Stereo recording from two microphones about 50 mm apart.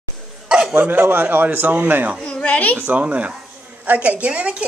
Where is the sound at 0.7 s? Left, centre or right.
Right.